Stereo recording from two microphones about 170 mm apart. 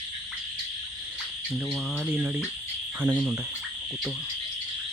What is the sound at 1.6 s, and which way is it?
Speech, 5° right (ahead or behind).